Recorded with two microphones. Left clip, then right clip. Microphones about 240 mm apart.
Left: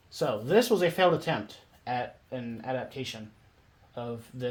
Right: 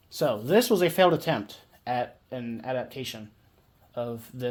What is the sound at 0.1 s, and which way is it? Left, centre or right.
Speech, right.